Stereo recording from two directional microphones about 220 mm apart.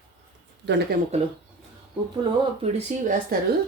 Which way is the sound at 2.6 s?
30° right (ahead or behind).